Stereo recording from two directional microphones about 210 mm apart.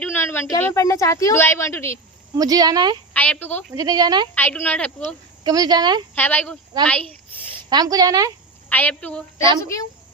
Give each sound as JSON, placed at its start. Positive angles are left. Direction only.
{"t": 0.0, "sound": "speech", "side_deg": 10}
{"t": 2.3, "sound": "speech", "side_deg": -15}
{"t": 3.1, "sound": "speech", "side_deg": 5}
{"t": 3.8, "sound": "speech", "side_deg": -20}
{"t": 4.4, "sound": "speech", "side_deg": 10}
{"t": 5.4, "sound": "speech", "side_deg": -20}
{"t": 6.1, "sound": "speech", "side_deg": 10}
{"t": 7.7, "sound": "speech", "side_deg": -20}
{"t": 8.7, "sound": "speech", "side_deg": 5}